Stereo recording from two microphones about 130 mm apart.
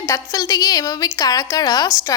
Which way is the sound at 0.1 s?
25° left (ahead or behind).